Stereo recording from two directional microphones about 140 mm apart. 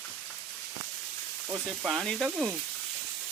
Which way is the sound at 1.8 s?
5° left (ahead or behind).